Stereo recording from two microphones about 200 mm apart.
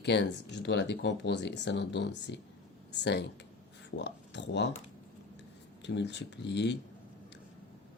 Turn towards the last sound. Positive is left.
turn(degrees=60)  # may be behind; listen again after turning